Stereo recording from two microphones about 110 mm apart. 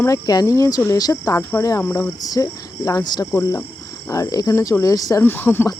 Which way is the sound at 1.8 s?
20° left (ahead or behind).